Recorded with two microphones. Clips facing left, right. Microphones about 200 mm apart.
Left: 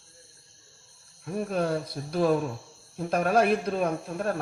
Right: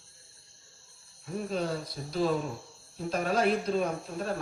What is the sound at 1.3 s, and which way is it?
Speech, 55° left (ahead or behind).